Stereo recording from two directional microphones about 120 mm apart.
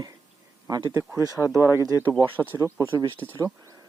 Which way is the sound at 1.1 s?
30° left (ahead or behind).